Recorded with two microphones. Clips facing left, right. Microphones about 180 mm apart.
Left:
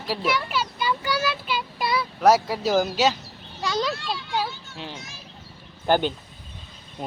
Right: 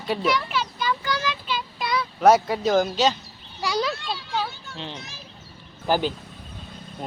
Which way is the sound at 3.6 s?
10° right (ahead or behind).